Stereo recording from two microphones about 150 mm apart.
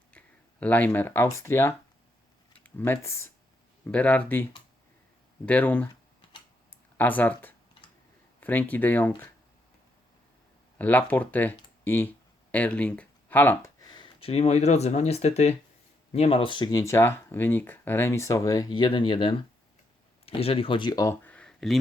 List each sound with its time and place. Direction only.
0.1 s a sound: 10° left (ahead or behind)
1.4 s speech: 15° left (ahead or behind)
5.5 s speech: 10° left (ahead or behind)
6.9 s speech: 10° left (ahead or behind)
10.8 s speech: 10° left (ahead or behind); by 16.8 s 30° left (ahead or behind)
16.8 s speech: 15° left (ahead or behind)
21.2 s a sound: 10° left (ahead or behind)